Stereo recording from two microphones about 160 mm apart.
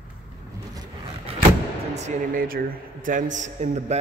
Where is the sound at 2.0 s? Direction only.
65° right (ahead or behind); by 3.9 s 45° right (ahead or behind).